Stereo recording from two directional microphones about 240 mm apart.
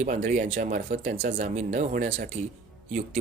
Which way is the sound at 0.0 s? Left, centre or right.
Right.